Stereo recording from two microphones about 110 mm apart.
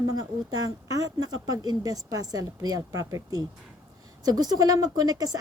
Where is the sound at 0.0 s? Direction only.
35° right (ahead or behind).